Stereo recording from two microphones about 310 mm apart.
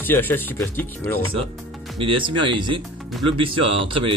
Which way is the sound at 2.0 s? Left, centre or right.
Centre.